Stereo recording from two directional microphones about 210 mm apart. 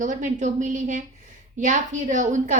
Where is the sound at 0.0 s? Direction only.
35° right (ahead or behind).